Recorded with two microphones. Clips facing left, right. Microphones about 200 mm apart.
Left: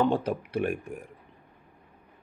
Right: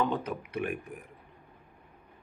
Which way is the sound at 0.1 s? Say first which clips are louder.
Left 5 dB; 30° left (ahead or behind).